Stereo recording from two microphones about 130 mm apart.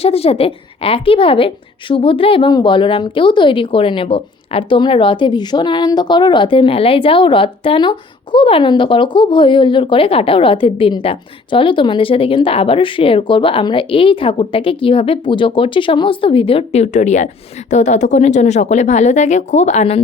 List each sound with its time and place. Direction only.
0.0 s a woman's voice: 50° left (ahead or behind)